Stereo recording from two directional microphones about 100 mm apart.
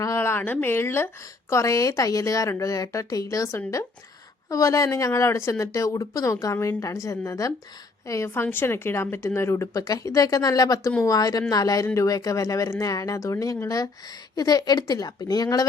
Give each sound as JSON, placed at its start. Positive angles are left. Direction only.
{"t": 0.0, "sound": "a woman's voice", "side_deg": 30}